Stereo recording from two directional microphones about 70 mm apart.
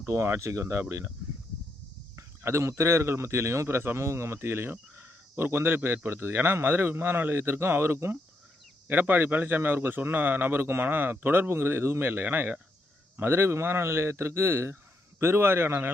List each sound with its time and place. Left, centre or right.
0.0 s speech: right
2.1 s speech: right